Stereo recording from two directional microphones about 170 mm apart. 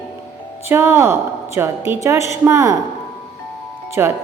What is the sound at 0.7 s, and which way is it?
A woman's voice, 15° right (ahead or behind).